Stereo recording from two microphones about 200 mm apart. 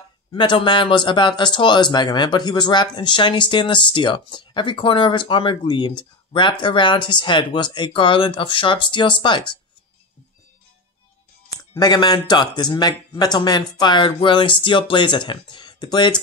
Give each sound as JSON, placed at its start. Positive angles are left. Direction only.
{"t": 0.3, "sound": "speech", "side_deg": 25}
{"t": 11.7, "sound": "speech", "side_deg": 20}